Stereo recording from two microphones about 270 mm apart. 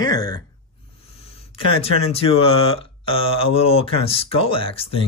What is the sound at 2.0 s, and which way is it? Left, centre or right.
Speech, left.